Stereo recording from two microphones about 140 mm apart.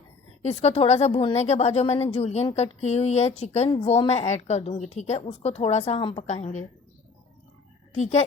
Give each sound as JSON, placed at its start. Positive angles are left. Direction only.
{"t": 0.4, "sound": "a woman's voice", "side_deg": 50}
{"t": 6.0, "sound": "a woman's voice", "side_deg": 35}
{"t": 6.2, "sound": "a woman's voice", "side_deg": 55}
{"t": 7.9, "sound": "a woman's voice", "side_deg": 55}